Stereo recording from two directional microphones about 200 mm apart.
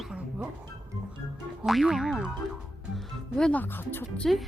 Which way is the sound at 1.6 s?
Centre (ahead or behind).